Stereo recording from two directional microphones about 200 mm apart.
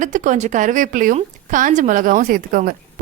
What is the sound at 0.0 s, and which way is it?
A woman's voice, 40° right (ahead or behind).